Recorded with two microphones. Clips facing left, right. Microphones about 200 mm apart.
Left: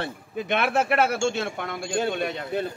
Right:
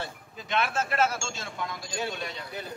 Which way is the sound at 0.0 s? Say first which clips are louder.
Left 8 dB; 65° left (ahead or behind).